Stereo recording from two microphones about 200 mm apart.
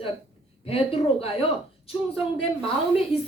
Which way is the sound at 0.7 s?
30° left (ahead or behind).